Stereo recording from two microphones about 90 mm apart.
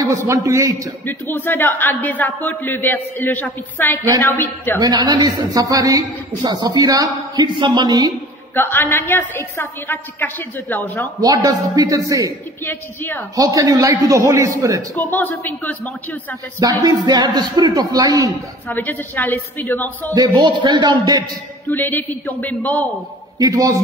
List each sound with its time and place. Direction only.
0.2 s a man's voice: 35° right (ahead or behind)
1.0 s a woman's voice: 20° left (ahead or behind)
4.8 s a woman's voice: 55° right (ahead or behind)
7.4 s a man's voice: 60° right (ahead or behind)
8.5 s a woman's voice: 25° left (ahead or behind)
11.2 s a man's voice: 45° right (ahead or behind)
12.6 s a woman's voice: 25° left (ahead or behind)
13.4 s a man's voice: 45° right (ahead or behind)
15.0 s a woman's voice: 20° left (ahead or behind)
16.5 s a woman's voice: 45° right (ahead or behind)
18.7 s a woman's voice: 20° left (ahead or behind)
20.3 s a man's voice: 60° right (ahead or behind)
21.6 s a woman's voice: 20° left (ahead or behind)
23.4 s a man's voice: 40° right (ahead or behind)